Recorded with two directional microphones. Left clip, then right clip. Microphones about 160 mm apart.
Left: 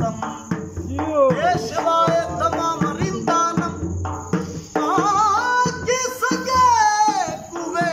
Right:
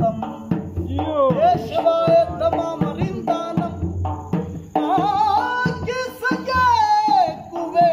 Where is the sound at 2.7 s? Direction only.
20° right (ahead or behind).